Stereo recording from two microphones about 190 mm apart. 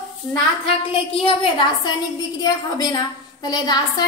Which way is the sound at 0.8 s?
30° left (ahead or behind).